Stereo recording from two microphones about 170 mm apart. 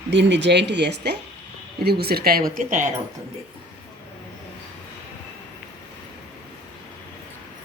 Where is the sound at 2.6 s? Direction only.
50° right (ahead or behind).